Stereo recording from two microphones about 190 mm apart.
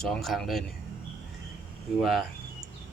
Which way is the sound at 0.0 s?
Centre (ahead or behind).